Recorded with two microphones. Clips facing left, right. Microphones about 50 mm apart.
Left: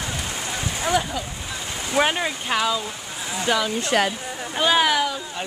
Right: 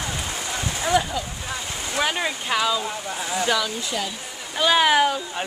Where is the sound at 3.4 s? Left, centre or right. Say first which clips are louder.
Left 2 dB; centre.